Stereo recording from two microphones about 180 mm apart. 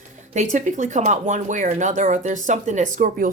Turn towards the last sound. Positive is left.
turn(degrees=-45)  # may be behind; listen again after turning